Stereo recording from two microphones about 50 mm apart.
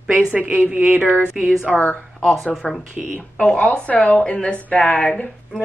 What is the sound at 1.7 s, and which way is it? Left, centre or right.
Speech, centre.